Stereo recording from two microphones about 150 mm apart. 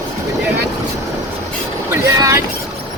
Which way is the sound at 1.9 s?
20° right (ahead or behind).